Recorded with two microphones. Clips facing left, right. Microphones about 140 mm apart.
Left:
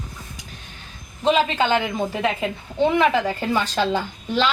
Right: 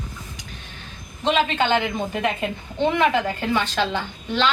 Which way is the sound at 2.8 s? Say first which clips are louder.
Left 2 dB; centre (ahead or behind).